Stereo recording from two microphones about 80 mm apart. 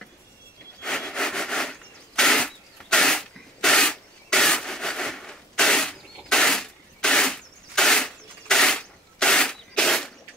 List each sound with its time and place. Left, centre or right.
0.8 s sniff: centre